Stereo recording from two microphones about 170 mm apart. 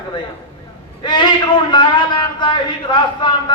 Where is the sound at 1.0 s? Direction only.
25° left (ahead or behind).